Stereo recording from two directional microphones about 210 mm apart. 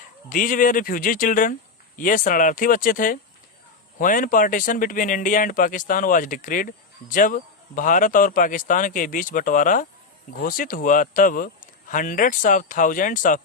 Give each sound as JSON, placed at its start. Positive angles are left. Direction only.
{"t": 0.3, "sound": "speech", "side_deg": 40}